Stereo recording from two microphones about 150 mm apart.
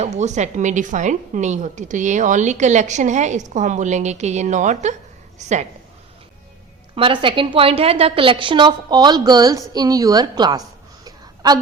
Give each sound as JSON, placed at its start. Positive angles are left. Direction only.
{"t": 0.0, "sound": "speech", "side_deg": -50}
{"t": 6.9, "sound": "a woman's voice", "side_deg": -35}
{"t": 11.0, "sound": "a sound", "side_deg": -25}